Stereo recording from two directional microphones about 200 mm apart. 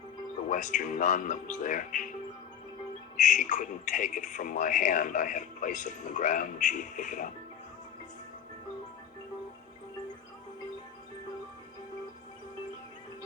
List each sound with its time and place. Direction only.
0.4 s a man's voice: 40° left (ahead or behind)
3.2 s a man's voice: 40° left (ahead or behind)